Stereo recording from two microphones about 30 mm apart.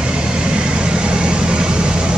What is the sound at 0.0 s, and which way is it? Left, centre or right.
Vehicle, right.